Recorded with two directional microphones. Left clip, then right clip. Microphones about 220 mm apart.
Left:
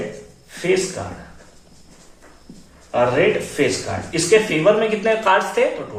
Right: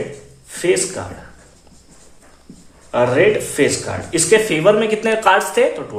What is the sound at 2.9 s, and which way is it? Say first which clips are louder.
Speech: right 3 dB; 50° right (ahead or behind).